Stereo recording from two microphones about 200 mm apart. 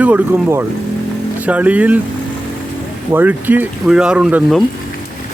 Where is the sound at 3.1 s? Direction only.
10° right (ahead or behind).